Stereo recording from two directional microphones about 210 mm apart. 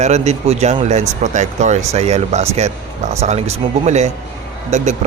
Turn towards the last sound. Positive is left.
turn(degrees=-35)  # may be behind; listen again after turning